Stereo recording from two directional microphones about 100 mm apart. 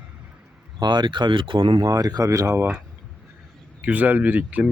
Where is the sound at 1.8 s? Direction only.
35° right (ahead or behind).